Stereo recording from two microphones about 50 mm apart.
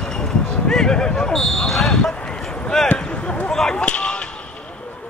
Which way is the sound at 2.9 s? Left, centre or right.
Left.